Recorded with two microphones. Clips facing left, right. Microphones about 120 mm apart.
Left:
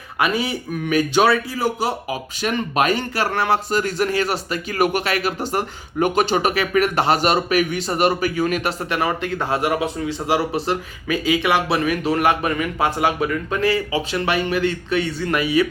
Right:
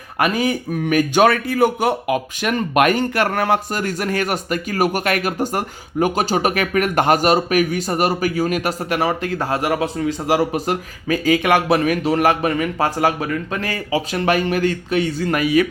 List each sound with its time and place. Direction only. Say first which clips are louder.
0.2 s a man's voice: right 3 dB; 45° right (ahead or behind)